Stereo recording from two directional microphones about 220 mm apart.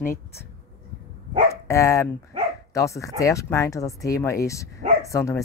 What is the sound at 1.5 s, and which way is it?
Speech, 15° left (ahead or behind).